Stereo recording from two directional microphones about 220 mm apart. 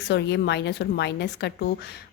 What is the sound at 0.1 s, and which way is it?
Speech, 50° left (ahead or behind).